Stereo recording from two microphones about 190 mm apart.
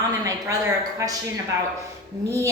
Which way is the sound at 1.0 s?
15° right (ahead or behind).